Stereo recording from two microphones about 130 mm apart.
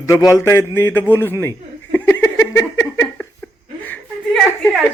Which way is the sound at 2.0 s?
20° left (ahead or behind).